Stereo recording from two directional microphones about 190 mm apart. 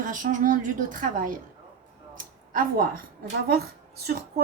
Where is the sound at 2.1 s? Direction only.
45° right (ahead or behind).